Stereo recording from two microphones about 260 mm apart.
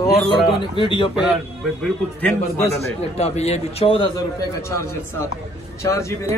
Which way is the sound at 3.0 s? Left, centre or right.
Left.